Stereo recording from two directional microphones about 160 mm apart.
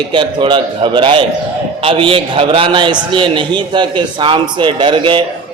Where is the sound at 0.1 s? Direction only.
30° right (ahead or behind).